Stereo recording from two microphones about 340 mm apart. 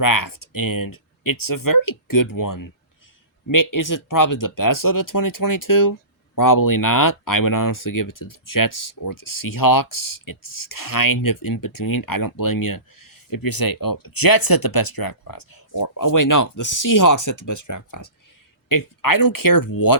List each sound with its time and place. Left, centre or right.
0.0 s speech: left
18.7 s speech: left